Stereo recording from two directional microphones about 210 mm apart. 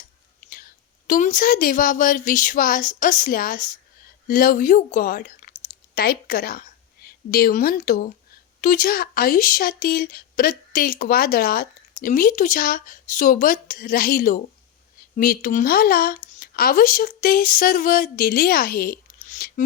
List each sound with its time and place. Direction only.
1.0 s a woman's voice: 40° left (ahead or behind)